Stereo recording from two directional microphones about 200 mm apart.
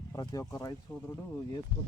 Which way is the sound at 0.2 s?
20° left (ahead or behind).